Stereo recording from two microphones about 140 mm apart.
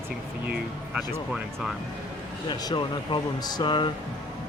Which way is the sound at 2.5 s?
35° left (ahead or behind).